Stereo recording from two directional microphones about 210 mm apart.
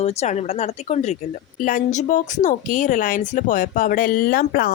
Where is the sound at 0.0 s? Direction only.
30° left (ahead or behind).